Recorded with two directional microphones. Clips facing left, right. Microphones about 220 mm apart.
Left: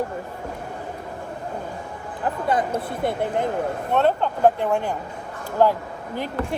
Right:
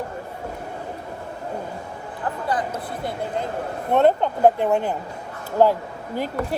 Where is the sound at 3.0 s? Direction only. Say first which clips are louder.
Left 4 dB; 20° left (ahead or behind).